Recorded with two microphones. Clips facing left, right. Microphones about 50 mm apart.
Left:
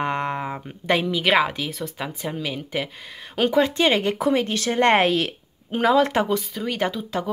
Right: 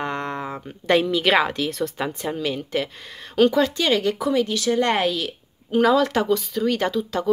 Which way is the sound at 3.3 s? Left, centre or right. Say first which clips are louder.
Right 1 dB; left.